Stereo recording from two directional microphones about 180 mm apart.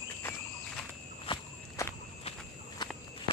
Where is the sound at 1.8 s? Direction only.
15° left (ahead or behind).